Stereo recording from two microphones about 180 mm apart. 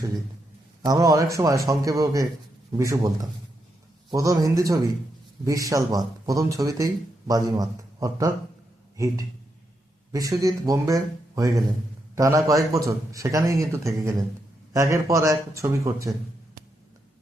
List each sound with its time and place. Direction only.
0.9 s speech: 20° right (ahead or behind)
10.1 s a man's voice: 20° right (ahead or behind)